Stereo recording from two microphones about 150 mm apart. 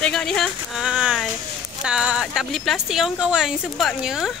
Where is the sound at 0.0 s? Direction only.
5° left (ahead or behind).